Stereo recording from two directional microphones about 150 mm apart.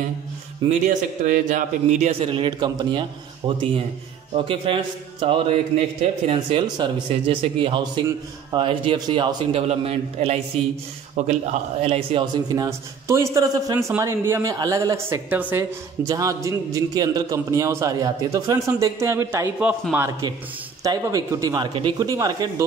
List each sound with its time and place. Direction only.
0.7 s a man's voice: 60° right (ahead or behind)
11.8 s a man's voice: 40° right (ahead or behind); by 22.7 s 25° right (ahead or behind)